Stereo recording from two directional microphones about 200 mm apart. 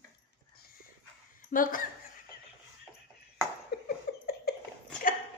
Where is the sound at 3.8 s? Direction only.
50° left (ahead or behind).